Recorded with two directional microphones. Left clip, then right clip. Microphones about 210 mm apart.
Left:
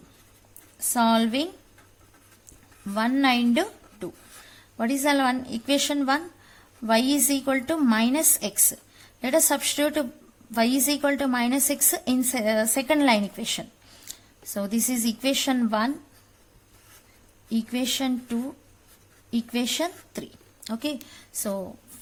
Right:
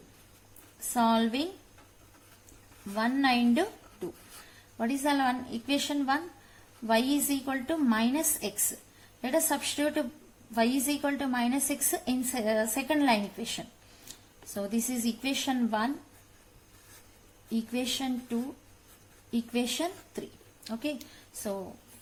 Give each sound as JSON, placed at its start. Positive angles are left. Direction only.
{"t": 0.9, "sound": "a woman's voice", "side_deg": 45}
{"t": 2.9, "sound": "a woman's voice", "side_deg": 45}
{"t": 4.8, "sound": "a woman's voice", "side_deg": 45}
{"t": 17.5, "sound": "a woman's voice", "side_deg": 45}